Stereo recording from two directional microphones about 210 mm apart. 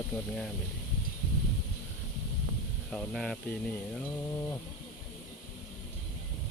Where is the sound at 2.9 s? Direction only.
5° left (ahead or behind).